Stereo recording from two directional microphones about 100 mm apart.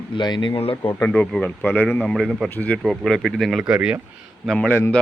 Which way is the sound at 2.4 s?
15° left (ahead or behind).